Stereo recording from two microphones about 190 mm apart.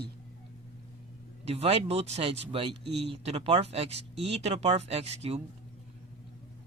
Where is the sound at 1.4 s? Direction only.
30° right (ahead or behind).